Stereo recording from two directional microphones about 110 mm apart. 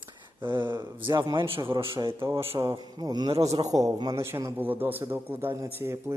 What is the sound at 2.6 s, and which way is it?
A man's voice, 40° right (ahead or behind).